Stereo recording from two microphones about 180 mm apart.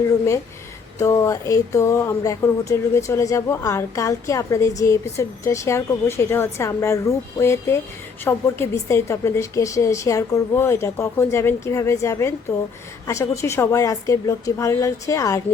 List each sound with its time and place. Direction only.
0.9 s a woman's voice: 15° left (ahead or behind)